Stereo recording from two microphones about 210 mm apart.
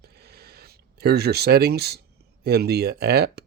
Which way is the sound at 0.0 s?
50° right (ahead or behind).